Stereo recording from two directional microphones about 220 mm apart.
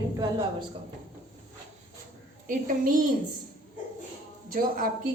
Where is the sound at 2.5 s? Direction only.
40° right (ahead or behind).